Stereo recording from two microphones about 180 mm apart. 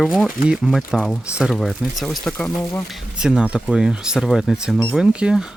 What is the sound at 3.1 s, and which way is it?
Speech, 5° right (ahead or behind).